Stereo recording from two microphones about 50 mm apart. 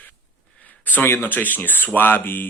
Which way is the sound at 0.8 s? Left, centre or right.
Left.